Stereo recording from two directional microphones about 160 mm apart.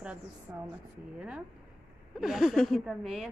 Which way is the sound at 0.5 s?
15° right (ahead or behind).